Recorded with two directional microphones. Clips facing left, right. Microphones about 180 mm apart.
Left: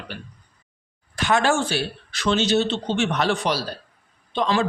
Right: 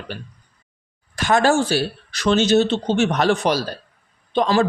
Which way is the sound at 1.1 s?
40° right (ahead or behind).